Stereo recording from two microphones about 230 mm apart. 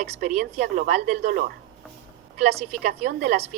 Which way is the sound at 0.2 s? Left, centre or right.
Right.